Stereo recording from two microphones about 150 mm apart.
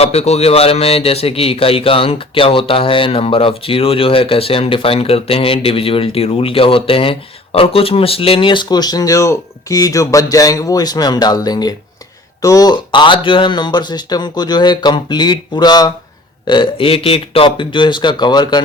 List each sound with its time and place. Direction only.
0.0 s speech: 45° left (ahead or behind); by 18.6 s 30° left (ahead or behind)